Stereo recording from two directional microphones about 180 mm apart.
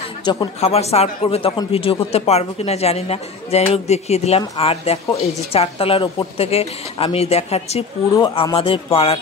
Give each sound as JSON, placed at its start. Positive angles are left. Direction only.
{"t": 0.2, "sound": "speech", "side_deg": 25}